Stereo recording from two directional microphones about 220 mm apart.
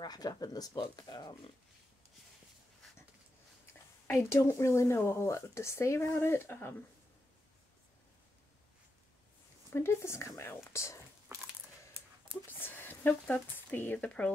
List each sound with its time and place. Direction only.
0.0 s speech: 15° left (ahead or behind)
4.1 s speech: 10° left (ahead or behind)
9.7 s speech: 10° left (ahead or behind)
11.3 s crushing: 10° right (ahead or behind)
12.4 s speech: 10° left (ahead or behind)